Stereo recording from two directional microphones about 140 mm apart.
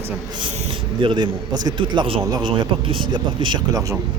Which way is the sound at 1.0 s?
35° right (ahead or behind).